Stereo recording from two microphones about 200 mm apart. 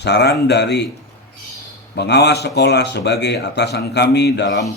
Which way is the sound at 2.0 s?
55° left (ahead or behind).